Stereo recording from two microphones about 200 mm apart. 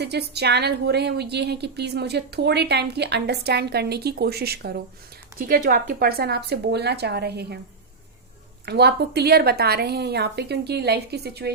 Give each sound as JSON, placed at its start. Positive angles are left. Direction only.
{"t": 0.0, "sound": "a woman's voice", "side_deg": -55}
{"t": 8.6, "sound": "a woman's voice", "side_deg": -55}